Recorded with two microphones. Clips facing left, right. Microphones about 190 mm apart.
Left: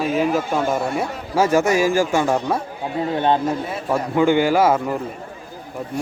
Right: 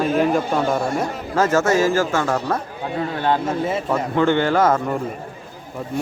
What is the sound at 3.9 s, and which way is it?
Speech, 10° left (ahead or behind).